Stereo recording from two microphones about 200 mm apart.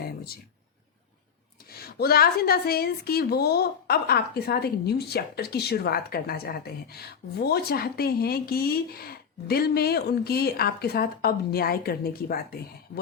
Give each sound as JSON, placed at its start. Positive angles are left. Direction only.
{"t": 2.0, "sound": "speech", "side_deg": 50}